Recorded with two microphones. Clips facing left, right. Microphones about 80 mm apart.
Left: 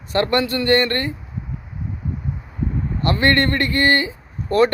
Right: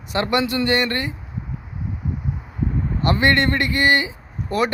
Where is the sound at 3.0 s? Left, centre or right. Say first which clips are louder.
Even; centre.